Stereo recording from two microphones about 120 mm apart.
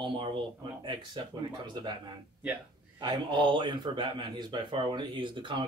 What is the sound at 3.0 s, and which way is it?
Speech, 45° right (ahead or behind).